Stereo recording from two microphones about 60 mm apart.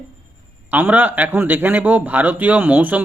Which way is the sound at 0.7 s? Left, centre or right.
Right.